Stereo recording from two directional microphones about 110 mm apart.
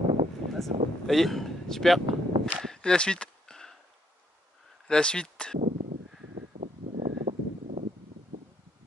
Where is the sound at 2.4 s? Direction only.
5° left (ahead or behind).